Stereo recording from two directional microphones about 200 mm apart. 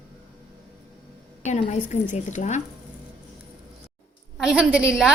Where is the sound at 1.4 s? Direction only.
35° left (ahead or behind).